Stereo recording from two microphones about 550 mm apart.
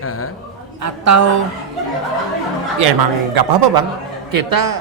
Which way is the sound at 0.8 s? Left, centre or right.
Right.